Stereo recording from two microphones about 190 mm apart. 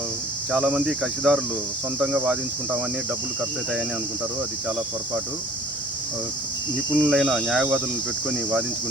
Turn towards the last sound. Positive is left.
turn(degrees=-5)  # may be behind; listen again after turning